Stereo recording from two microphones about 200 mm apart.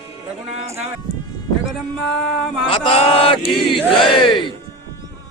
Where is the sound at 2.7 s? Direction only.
25° left (ahead or behind).